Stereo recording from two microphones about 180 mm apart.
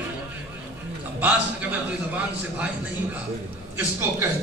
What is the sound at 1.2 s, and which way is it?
A man's voice, 5° right (ahead or behind).